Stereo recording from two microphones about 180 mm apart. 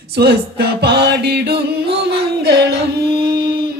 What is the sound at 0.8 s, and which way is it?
Music, 65° right (ahead or behind).